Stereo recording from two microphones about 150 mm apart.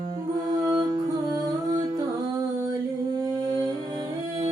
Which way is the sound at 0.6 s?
25° right (ahead or behind).